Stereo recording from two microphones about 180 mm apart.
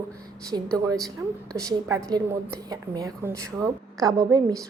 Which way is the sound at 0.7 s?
20° right (ahead or behind).